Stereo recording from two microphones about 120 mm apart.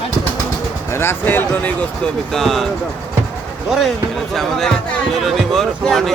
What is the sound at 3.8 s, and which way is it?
Speech, centre (ahead or behind).